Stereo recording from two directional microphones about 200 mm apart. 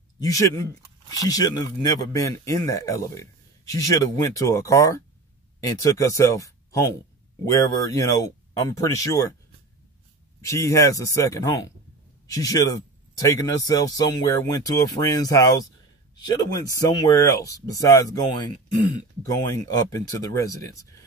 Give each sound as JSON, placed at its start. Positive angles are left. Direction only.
{"t": 0.2, "sound": "a man's voice", "side_deg": 15}
{"t": 10.4, "sound": "a man's voice", "side_deg": 15}